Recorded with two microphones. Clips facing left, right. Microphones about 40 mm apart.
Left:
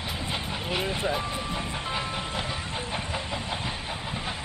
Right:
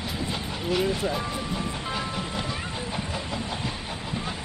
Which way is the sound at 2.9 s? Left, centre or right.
Centre.